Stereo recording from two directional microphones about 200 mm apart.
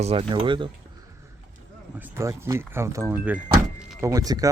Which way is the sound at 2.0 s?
15° right (ahead or behind).